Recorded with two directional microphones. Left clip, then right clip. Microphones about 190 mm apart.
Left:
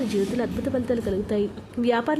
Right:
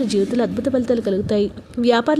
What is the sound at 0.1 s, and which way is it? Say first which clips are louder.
A woman's voice: right 6 dB; 25° right (ahead or behind).